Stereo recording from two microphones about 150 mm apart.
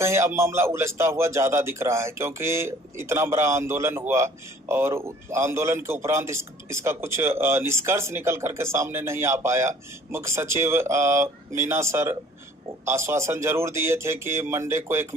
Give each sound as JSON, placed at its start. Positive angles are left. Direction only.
{"t": 0.0, "sound": "a man's voice", "side_deg": -20}